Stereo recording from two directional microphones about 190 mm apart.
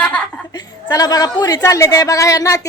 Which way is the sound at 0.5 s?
20° left (ahead or behind).